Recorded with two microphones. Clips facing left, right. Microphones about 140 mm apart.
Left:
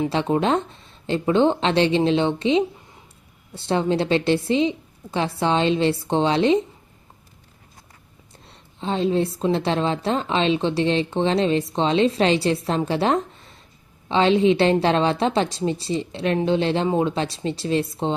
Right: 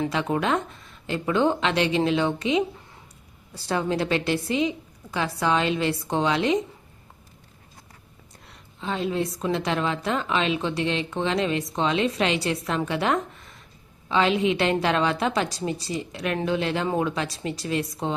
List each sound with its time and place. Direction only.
0.1 s a woman's voice: 30° left (ahead or behind)
8.4 s a woman's voice: 30° left (ahead or behind)